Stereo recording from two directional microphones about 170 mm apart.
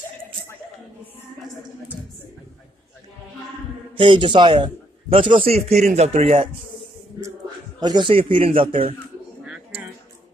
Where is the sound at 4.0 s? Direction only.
30° right (ahead or behind).